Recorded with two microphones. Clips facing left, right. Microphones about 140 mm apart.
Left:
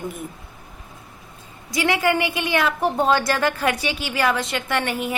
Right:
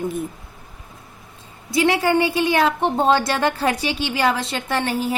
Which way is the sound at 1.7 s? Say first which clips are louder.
Right 3 dB; 30° right (ahead or behind).